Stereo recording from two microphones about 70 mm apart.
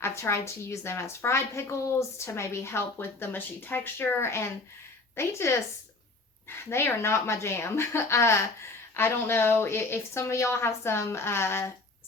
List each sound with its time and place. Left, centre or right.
0.0 s speech: left
6.7 s speech: left